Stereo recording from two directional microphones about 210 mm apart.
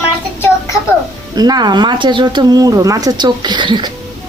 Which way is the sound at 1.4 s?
20° right (ahead or behind).